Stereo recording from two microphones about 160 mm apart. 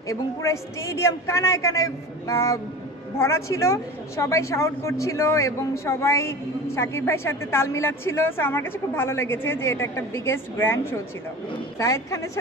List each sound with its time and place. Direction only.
0.1 s a woman's voice: 20° left (ahead or behind)